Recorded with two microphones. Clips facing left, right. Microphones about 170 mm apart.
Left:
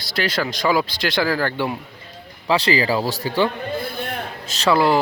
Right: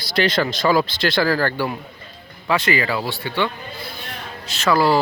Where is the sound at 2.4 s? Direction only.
30° left (ahead or behind).